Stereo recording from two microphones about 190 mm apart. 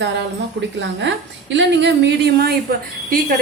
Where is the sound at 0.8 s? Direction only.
70° right (ahead or behind); by 3.3 s 50° right (ahead or behind).